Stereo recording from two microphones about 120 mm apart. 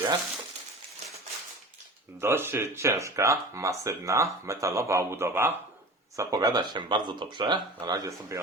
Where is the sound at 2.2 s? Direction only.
20° right (ahead or behind).